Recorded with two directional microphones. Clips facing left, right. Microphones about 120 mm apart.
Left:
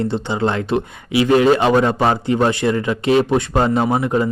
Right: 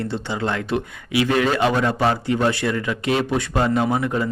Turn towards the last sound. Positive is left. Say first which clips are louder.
# left 4 dB
turn(degrees=25)  # may be behind; listen again after turning